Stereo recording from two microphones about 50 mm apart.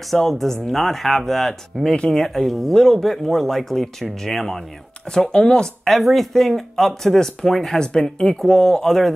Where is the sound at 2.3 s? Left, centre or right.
Centre.